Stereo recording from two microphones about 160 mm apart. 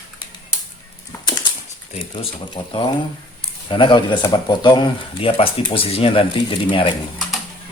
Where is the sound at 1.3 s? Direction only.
25° left (ahead or behind).